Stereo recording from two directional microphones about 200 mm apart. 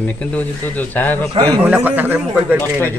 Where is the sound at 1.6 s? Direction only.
10° right (ahead or behind).